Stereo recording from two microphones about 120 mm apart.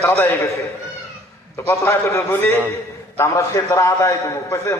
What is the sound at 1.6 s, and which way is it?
A man's voice, 20° left (ahead or behind).